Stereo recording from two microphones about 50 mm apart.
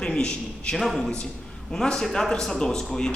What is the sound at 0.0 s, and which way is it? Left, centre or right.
A man's voice, centre.